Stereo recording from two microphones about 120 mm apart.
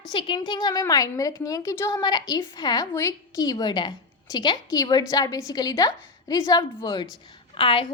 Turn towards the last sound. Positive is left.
turn(degrees=45)  # may be behind; listen again after turning